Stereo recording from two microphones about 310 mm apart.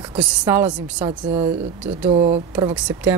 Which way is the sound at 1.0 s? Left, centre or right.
Centre.